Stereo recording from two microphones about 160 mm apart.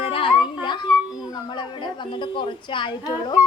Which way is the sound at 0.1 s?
35° left (ahead or behind).